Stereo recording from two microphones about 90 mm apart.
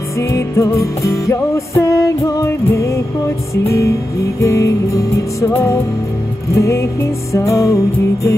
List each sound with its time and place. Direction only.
0.3 s music: 30° left (ahead or behind)
6.5 s music: 35° left (ahead or behind)